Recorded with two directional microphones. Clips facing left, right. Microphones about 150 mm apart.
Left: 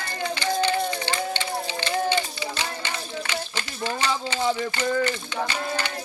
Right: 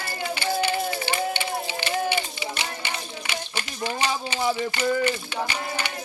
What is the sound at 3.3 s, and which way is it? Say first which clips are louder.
Speech: left 1 dB; 15° right (ahead or behind).